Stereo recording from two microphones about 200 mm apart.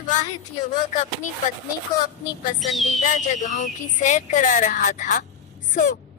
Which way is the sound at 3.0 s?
40° left (ahead or behind).